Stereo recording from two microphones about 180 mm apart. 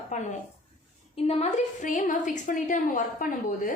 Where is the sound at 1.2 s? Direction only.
40° left (ahead or behind).